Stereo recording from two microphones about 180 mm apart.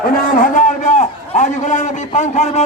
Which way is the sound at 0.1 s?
50° left (ahead or behind).